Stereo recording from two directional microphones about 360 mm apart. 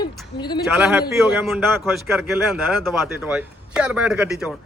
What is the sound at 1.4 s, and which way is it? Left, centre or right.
A man's voice, centre.